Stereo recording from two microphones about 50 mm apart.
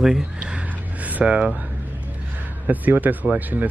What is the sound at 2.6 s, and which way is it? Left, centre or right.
Speech, right.